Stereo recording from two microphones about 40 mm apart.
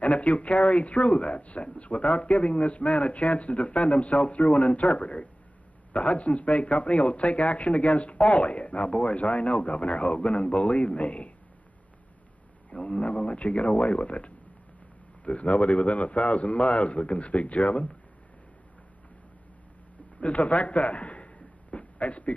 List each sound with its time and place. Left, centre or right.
0.0 s speech: left
12.6 s speech: left
20.2 s a man's voice: left
21.7 s a sound: left